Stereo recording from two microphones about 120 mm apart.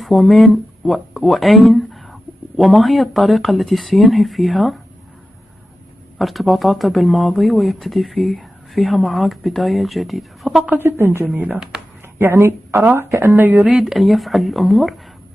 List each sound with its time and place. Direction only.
0.0 s speech: centre (ahead or behind)
6.1 s speech: centre (ahead or behind)
10.6 s speech: 15° right (ahead or behind)
13.7 s speech: centre (ahead or behind)